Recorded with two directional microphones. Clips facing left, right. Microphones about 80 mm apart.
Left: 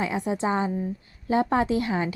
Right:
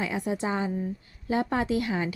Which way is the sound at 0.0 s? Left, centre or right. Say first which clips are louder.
Left 3 dB; left.